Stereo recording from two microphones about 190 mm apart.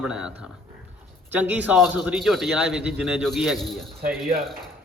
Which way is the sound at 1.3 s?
10° right (ahead or behind).